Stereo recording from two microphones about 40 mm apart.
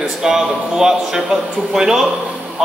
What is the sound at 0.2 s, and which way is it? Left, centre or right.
A man's voice, centre.